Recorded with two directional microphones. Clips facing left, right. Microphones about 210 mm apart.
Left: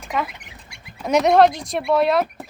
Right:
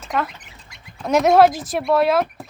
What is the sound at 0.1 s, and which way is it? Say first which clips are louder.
Speech: right 1 dB; 5° left (ahead or behind).